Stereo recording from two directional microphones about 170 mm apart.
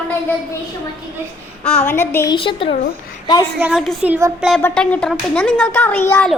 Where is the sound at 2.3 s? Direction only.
30° left (ahead or behind).